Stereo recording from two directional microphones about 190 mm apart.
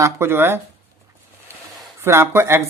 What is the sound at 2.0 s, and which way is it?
Speech, 15° right (ahead or behind).